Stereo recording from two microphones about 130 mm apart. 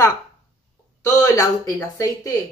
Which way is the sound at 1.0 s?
25° left (ahead or behind).